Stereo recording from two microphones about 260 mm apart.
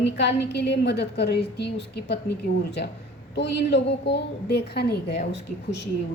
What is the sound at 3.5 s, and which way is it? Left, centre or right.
A woman's voice, left.